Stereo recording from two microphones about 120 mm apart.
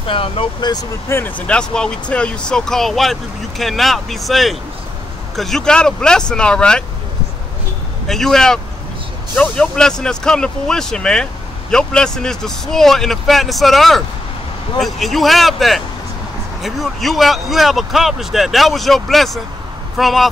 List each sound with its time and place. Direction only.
0.0 s speech: 45° left (ahead or behind)
1.0 s speech: 20° left (ahead or behind)
1.5 s speech: 5° left (ahead or behind)
8.1 s speech: 5° left (ahead or behind)